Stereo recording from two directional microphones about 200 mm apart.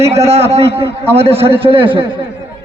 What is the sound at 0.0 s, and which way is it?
A man's voice, 30° right (ahead or behind).